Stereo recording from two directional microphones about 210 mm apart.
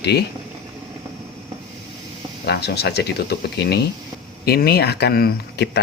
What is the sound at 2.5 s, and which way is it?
Speech, 50° left (ahead or behind).